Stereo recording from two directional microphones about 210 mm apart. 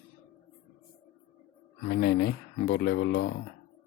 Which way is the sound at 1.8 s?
50° left (ahead or behind).